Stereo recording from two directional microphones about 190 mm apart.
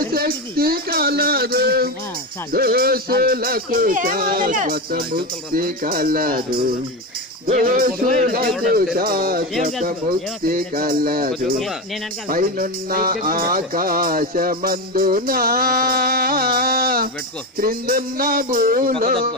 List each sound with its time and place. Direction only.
0.0 s music: 50° right (ahead or behind)
8.0 s speech: centre (ahead or behind)
8.9 s music: 50° right (ahead or behind)